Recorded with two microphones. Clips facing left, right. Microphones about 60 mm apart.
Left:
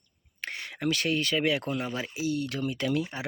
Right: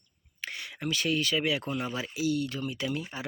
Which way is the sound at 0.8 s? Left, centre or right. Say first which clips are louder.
Left 2 dB; left.